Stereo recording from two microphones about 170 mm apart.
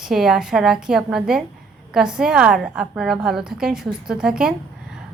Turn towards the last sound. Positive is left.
turn(degrees=-5)  # may be behind; listen again after turning